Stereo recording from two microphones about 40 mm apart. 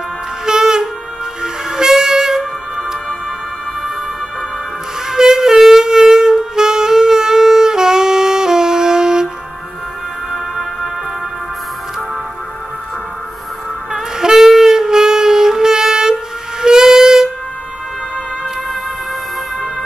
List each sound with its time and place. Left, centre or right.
0.5 s wind instrument: centre
1.4 s train: centre
5.1 s saxophone: centre
10.3 s music: centre
13.9 s wind instrument: centre